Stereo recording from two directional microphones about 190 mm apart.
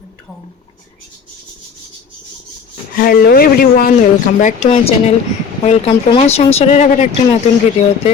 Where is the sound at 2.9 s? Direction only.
50° left (ahead or behind).